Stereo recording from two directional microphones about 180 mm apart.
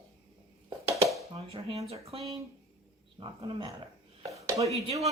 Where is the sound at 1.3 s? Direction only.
35° right (ahead or behind).